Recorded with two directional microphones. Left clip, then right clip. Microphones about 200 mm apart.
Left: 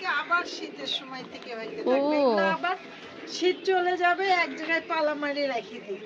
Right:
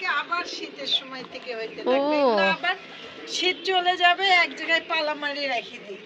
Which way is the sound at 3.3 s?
40° left (ahead or behind).